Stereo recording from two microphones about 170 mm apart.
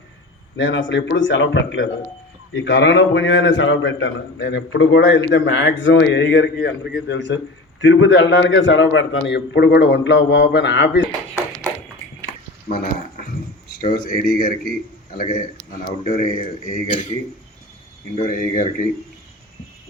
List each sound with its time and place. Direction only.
0.5 s a man's voice: 90° left
12.6 s a sound: 60° left (ahead or behind)
13.8 s speech: 55° left (ahead or behind)
16.1 s speech: 50° left (ahead or behind)
18.3 s speech: 55° left (ahead or behind)